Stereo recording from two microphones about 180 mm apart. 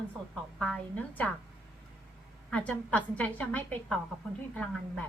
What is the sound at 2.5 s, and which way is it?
A woman's voice, 5° left (ahead or behind).